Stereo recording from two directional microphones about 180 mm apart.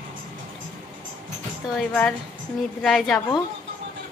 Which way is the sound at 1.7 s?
5° left (ahead or behind).